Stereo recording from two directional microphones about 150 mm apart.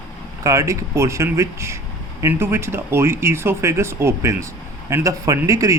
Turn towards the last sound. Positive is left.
turn(degrees=-20)  # may be behind; listen again after turning